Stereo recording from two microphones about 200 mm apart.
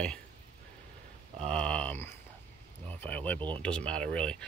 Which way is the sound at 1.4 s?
5° left (ahead or behind).